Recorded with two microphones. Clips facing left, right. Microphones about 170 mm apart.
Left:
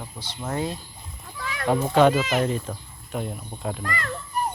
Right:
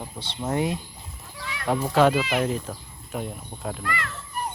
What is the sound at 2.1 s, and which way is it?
Speech, 40° left (ahead or behind).